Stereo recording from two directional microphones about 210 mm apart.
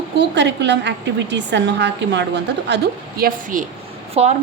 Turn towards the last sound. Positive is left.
turn(degrees=-30)  # may be behind; listen again after turning